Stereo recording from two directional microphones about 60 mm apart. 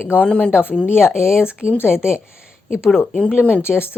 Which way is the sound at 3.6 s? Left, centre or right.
Left.